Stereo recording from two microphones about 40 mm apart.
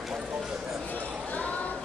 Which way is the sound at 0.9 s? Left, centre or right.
Left.